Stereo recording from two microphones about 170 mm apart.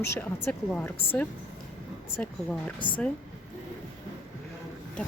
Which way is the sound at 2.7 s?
30° left (ahead or behind).